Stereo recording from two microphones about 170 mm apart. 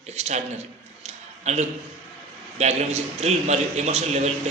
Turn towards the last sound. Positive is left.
turn(degrees=-40)  # may be behind; listen again after turning